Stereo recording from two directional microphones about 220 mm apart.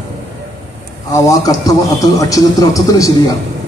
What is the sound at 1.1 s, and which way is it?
Speech, 15° left (ahead or behind).